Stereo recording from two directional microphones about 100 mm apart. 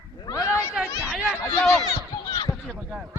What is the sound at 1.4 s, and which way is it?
Speech, 15° left (ahead or behind).